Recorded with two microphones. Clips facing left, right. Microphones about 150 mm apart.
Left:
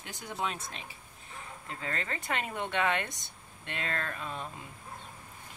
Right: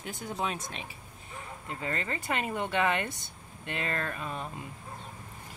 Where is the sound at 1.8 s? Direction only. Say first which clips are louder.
Right 3 dB; 15° right (ahead or behind).